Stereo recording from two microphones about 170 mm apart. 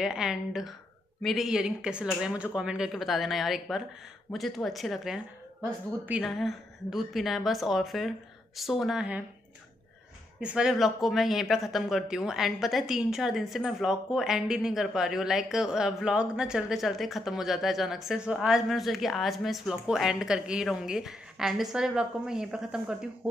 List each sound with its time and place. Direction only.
0.0 s speech: 5° right (ahead or behind)
10.4 s speech: 5° right (ahead or behind)